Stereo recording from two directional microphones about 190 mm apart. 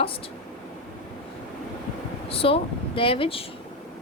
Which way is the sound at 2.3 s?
30° left (ahead or behind).